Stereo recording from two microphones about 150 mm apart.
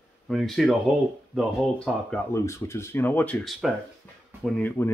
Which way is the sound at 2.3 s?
20° left (ahead or behind).